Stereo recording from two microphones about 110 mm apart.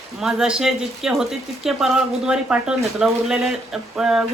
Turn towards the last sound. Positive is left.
turn(degrees=-5)  # may be behind; listen again after turning